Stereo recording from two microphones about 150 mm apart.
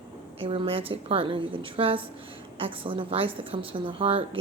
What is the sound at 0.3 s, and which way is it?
A woman's voice, 40° right (ahead or behind).